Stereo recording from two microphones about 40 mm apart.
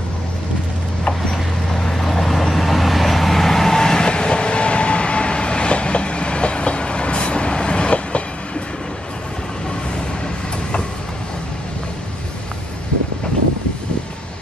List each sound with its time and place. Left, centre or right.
1.3 s vehicle: centre; by 8.6 s left